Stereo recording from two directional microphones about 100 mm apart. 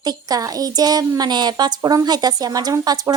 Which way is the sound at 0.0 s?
40° right (ahead or behind).